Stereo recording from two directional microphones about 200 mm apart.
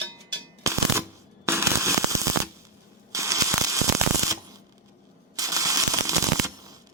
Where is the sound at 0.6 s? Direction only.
15° right (ahead or behind).